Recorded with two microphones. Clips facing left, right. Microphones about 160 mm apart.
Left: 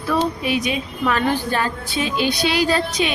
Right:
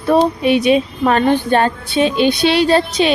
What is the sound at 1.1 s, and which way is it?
Speech, 60° right (ahead or behind).